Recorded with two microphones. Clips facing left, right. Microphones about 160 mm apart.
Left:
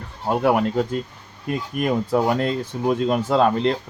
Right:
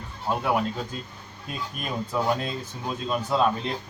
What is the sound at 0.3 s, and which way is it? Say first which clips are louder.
Speech: left 6 dB; 65° left (ahead or behind).